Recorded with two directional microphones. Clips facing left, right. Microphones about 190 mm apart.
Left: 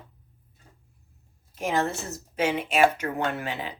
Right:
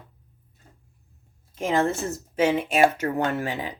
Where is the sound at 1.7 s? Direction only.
50° right (ahead or behind).